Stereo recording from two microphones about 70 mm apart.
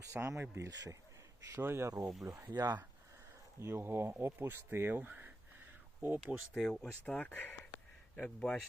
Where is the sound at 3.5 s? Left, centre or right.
Right.